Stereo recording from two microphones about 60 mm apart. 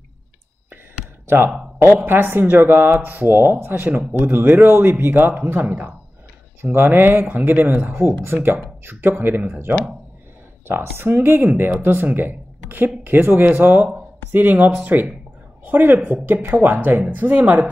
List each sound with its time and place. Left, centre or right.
1.2 s a sound: right
1.8 s speech: right
8.0 s speech: right
9.2 s speech: right
10.7 s speech: right